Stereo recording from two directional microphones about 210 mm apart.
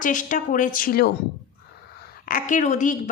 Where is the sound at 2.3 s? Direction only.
40° left (ahead or behind).